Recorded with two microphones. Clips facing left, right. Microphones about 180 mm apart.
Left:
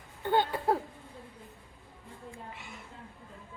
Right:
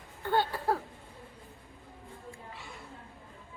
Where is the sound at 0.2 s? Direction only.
20° left (ahead or behind).